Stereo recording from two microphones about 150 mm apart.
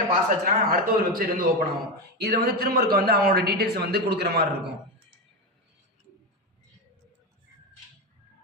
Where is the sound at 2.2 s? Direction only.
90° right.